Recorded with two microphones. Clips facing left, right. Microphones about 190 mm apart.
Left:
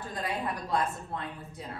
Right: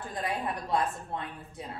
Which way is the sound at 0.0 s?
25° right (ahead or behind).